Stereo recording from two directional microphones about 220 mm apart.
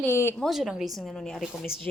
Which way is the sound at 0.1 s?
10° left (ahead or behind).